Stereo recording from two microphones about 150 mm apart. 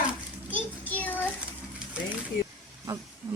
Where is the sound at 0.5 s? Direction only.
10° left (ahead or behind).